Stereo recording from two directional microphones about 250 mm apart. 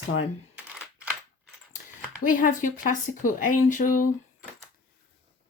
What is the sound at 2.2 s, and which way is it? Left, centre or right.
Speech, left.